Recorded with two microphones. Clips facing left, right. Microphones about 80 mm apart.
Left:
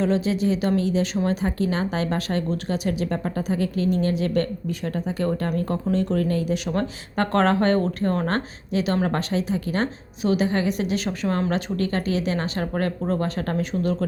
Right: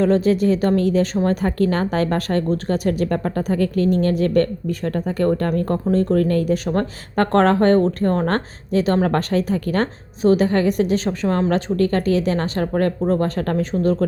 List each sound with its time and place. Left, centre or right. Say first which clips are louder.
0.0 s a woman's voice: right 6 dB; right
6.7 s speech: right 4 dB; right